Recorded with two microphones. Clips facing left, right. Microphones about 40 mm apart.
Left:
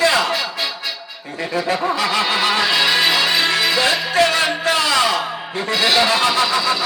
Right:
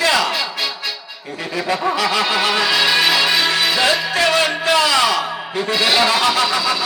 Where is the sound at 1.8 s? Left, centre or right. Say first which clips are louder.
Right 1 dB; right.